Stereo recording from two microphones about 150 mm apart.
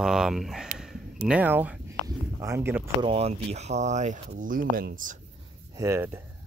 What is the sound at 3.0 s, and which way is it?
Speech, 45° right (ahead or behind).